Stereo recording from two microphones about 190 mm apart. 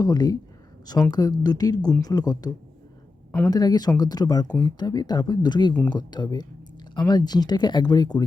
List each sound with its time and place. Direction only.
0.0 s speech: 20° left (ahead or behind)
3.5 s speech: 20° left (ahead or behind)